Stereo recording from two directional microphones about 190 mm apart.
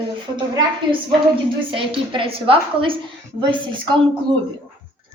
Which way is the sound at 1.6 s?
25° right (ahead or behind).